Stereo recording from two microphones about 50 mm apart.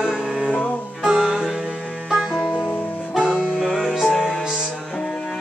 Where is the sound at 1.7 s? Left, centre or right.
Centre.